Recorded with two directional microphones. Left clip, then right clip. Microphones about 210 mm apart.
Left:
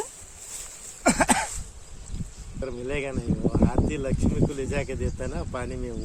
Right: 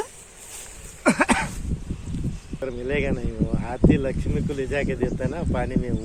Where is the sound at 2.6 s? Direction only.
55° left (ahead or behind).